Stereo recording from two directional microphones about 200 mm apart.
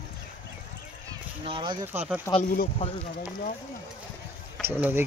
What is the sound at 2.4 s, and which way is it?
Speech, 50° left (ahead or behind).